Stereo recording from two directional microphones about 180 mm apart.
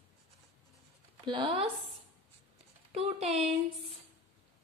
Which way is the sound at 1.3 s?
30° right (ahead or behind).